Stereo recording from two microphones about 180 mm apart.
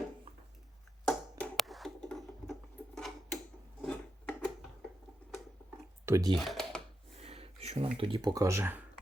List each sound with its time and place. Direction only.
1.0 s hands: 5° left (ahead or behind)
3.8 s wood: 10° left (ahead or behind)
6.1 s speech: 15° right (ahead or behind)
6.3 s typing: centre (ahead or behind)
7.2 s a sound: 35° right (ahead or behind)
7.9 s speech: 30° right (ahead or behind); by 8.8 s 15° right (ahead or behind)